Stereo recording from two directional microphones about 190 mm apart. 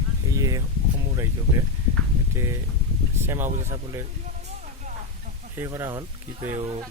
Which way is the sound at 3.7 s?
20° right (ahead or behind).